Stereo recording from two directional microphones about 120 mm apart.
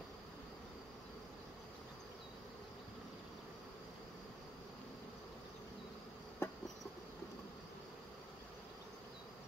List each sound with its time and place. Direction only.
6.4 s insect: 20° left (ahead or behind)